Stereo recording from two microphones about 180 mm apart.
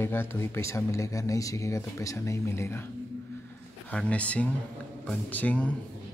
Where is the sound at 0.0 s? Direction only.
10° left (ahead or behind).